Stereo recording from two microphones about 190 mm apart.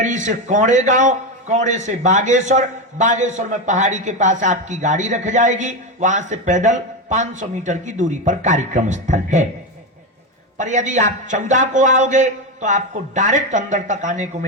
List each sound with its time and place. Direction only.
0.0 s a man's voice: 40° right (ahead or behind)
10.6 s a man's voice: 40° right (ahead or behind)